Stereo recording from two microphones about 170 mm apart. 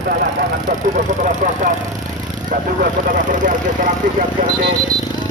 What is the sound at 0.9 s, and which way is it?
Speech, 50° right (ahead or behind).